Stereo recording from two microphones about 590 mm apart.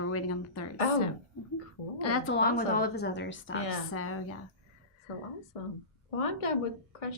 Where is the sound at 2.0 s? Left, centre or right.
Left.